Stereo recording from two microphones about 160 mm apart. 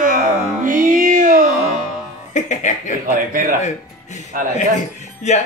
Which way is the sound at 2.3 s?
50° left (ahead or behind).